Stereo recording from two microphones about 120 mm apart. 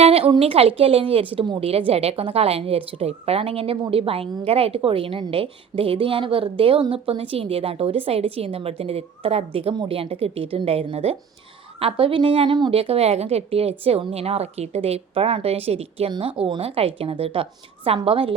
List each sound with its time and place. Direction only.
0.0 s a woman's voice: 50° right (ahead or behind)
12.8 s a woman's voice: 55° right (ahead or behind)
16.1 s a woman's voice: 45° right (ahead or behind)